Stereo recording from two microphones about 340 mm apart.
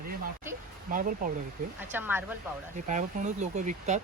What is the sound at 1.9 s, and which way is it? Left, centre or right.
Speech, centre.